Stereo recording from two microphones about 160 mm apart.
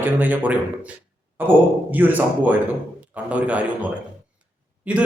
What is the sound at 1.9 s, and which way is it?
A man's voice, 10° right (ahead or behind).